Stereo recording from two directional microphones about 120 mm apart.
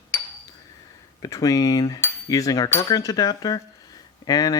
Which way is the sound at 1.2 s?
30° left (ahead or behind).